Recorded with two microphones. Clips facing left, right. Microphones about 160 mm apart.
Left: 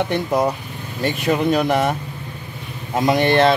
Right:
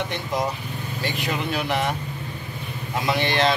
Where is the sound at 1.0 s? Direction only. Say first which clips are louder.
Left 9 dB; 45° left (ahead or behind).